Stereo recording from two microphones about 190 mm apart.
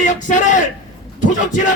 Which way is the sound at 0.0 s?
40° left (ahead or behind).